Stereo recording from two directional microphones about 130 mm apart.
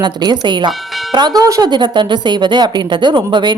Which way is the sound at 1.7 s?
35° right (ahead or behind).